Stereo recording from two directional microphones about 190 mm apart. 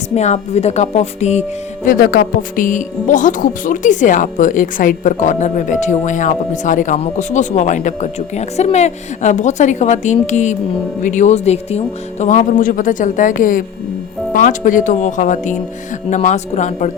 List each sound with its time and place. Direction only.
0.1 s speech: 35° left (ahead or behind)